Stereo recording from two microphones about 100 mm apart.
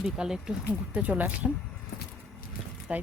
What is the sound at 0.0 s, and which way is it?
Speech, 5° right (ahead or behind).